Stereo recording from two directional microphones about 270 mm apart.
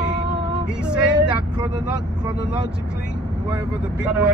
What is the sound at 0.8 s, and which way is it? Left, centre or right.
Speech, centre.